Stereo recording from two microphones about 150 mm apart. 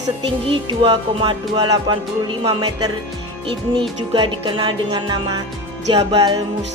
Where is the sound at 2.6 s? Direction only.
25° right (ahead or behind).